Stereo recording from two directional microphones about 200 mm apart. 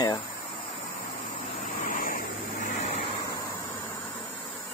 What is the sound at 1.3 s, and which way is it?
Vehicle, 45° left (ahead or behind).